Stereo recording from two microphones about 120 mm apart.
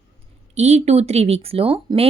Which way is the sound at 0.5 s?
65° right (ahead or behind).